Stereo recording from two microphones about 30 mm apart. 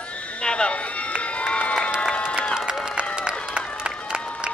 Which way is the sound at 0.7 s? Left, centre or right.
Left.